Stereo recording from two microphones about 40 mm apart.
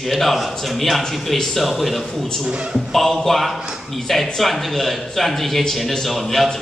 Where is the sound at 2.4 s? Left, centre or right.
Right.